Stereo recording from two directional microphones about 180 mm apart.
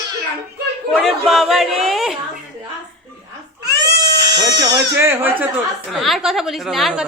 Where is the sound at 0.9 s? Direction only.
Centre (ahead or behind).